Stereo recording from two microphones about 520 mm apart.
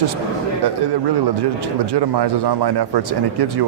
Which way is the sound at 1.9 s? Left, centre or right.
Right.